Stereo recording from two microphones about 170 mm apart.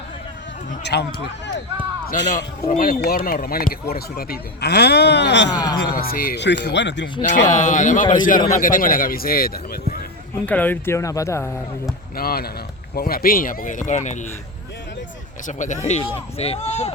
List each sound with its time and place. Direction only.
0.9 s speech: 80° left
2.0 s speech: 45° left (ahead or behind); by 5.5 s 90° left
5.5 s speech: 25° left (ahead or behind)
6.0 s speech: 60° left (ahead or behind); by 7.1 s 90° left
7.2 s speech: 50° left (ahead or behind)
10.4 s speech: 10° left (ahead or behind)
12.1 s speech: 60° left (ahead or behind); by 14.3 s 45° left (ahead or behind)
15.4 s speech: 45° left (ahead or behind)